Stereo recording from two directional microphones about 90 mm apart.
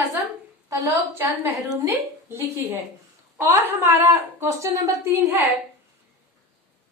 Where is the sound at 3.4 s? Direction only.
25° right (ahead or behind).